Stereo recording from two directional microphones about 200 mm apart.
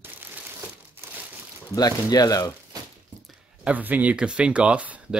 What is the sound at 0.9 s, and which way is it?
Crumpling, 10° right (ahead or behind).